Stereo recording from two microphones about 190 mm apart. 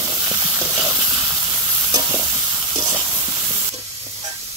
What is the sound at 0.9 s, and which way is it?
Hiss, 20° right (ahead or behind).